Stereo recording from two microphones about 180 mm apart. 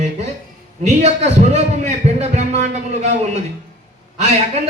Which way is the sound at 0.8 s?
40° right (ahead or behind).